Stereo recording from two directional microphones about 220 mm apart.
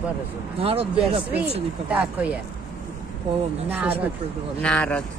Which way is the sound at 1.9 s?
5° right (ahead or behind).